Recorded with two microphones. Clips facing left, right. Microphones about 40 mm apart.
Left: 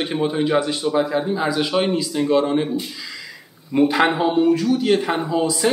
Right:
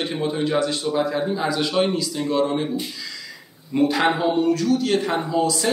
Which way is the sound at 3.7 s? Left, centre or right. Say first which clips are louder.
Left 2 dB; left.